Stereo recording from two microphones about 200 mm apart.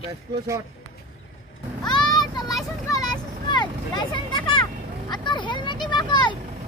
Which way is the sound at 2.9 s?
20° left (ahead or behind).